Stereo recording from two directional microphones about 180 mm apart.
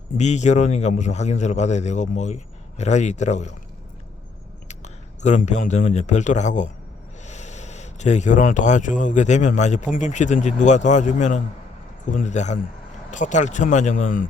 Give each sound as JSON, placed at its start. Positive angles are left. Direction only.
{"t": 0.2, "sound": "speech", "side_deg": 40}
{"t": 4.7, "sound": "speech", "side_deg": 40}